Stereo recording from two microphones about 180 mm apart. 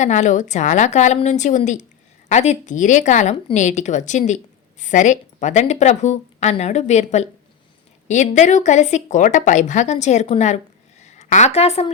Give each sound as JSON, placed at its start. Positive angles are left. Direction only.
{"t": 0.0, "sound": "a woman's voice", "side_deg": 40}